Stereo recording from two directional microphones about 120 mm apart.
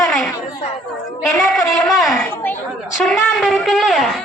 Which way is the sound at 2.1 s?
15° left (ahead or behind).